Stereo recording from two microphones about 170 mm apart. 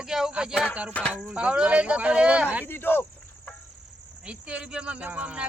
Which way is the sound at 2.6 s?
10° left (ahead or behind).